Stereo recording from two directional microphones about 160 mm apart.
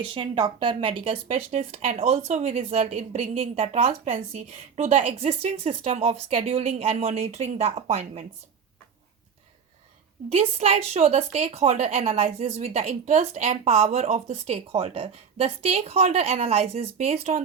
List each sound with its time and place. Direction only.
0.0 s speech: 30° right (ahead or behind)
10.2 s speech: 40° right (ahead or behind)